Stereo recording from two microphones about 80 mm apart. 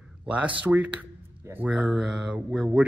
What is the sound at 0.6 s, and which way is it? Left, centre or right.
Speech, centre.